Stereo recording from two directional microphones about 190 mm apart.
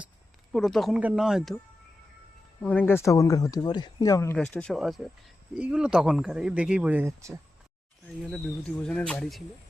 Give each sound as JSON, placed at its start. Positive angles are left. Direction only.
{"t": 0.5, "sound": "speech", "side_deg": 0}
{"t": 2.6, "sound": "speech", "side_deg": 10}
{"t": 4.4, "sound": "speech", "side_deg": 5}
{"t": 8.2, "sound": "speech", "side_deg": 0}